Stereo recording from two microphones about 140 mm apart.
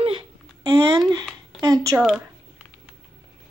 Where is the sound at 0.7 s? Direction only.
30° right (ahead or behind).